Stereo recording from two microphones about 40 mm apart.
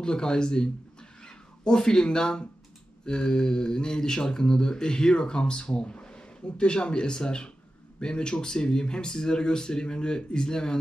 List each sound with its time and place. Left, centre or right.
0.0 s speech: centre